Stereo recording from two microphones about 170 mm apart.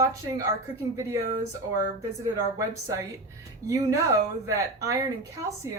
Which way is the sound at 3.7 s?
20° right (ahead or behind).